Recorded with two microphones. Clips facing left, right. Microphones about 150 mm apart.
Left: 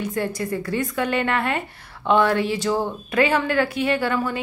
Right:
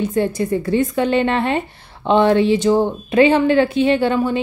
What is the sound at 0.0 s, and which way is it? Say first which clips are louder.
A woman's voice: right 7 dB; 25° right (ahead or behind).